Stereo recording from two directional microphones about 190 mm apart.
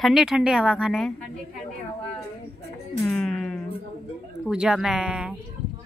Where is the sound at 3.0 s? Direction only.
Centre (ahead or behind).